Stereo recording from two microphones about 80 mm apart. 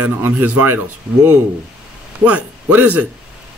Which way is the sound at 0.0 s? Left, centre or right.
Right.